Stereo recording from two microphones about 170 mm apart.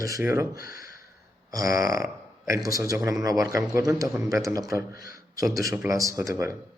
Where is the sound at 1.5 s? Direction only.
20° right (ahead or behind).